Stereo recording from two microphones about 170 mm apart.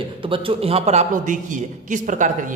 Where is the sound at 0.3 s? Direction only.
30° right (ahead or behind).